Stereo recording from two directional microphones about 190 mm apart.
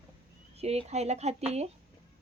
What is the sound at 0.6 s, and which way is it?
Speech, 35° right (ahead or behind).